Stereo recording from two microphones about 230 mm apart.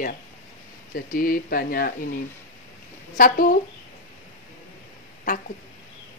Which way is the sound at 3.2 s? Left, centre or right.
Left.